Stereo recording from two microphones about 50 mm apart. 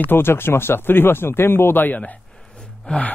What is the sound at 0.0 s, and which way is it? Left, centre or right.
Speech, left.